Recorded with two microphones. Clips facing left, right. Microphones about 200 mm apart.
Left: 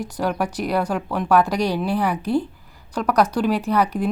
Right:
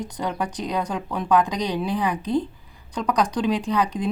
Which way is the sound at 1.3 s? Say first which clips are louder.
Left 2 dB; 15° right (ahead or behind).